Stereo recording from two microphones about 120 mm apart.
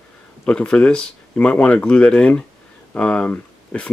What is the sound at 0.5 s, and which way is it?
Speech, 10° left (ahead or behind).